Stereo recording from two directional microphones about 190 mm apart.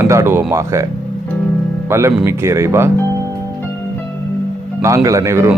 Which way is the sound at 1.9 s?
15° right (ahead or behind).